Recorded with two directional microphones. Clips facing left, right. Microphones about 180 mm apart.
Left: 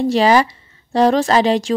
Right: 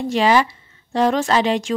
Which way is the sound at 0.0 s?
35° left (ahead or behind).